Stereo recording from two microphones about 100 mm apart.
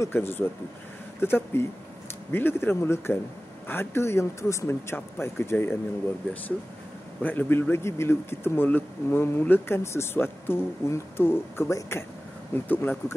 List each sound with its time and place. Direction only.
0.0 s speech: 25° left (ahead or behind)
7.2 s speech: 20° left (ahead or behind)